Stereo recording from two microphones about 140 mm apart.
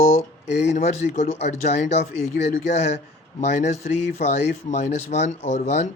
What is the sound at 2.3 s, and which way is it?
Speech, 90° left.